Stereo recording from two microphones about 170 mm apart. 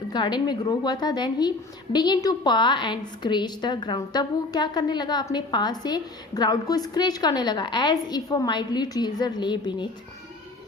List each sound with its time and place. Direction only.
0.1 s a woman's voice: 25° left (ahead or behind)